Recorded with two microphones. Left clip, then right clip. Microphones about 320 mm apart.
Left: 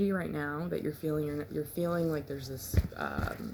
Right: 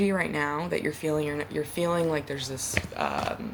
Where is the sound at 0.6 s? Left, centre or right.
Right.